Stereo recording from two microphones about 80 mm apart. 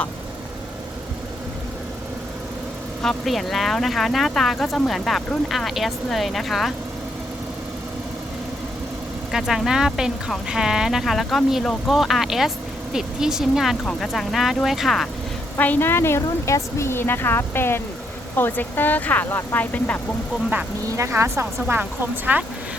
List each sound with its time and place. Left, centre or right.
3.0 s speech: centre
9.3 s speech: centre
15.5 s a woman's voice: left
20.9 s speech: right